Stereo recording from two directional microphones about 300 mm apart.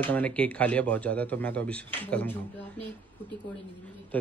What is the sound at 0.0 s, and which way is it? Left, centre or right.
A man's voice, centre.